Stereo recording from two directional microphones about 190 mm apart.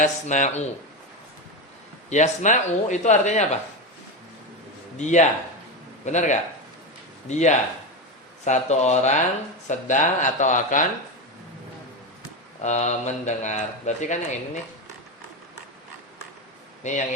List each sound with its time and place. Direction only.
0.0 s speech: 40° left (ahead or behind)
2.0 s speech: 35° left (ahead or behind)
5.0 s speech: 40° left (ahead or behind)
12.6 s speech: 35° left (ahead or behind)
16.8 s speech: 40° left (ahead or behind)